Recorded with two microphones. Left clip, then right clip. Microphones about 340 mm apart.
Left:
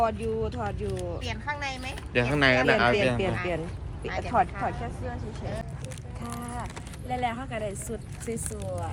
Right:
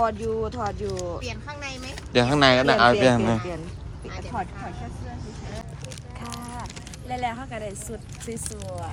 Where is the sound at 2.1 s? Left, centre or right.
Centre.